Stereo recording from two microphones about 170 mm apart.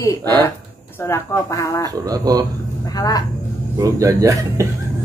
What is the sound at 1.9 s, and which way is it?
Speech, 20° right (ahead or behind).